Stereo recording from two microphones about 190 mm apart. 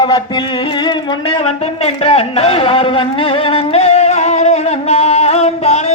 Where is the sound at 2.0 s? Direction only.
30° left (ahead or behind).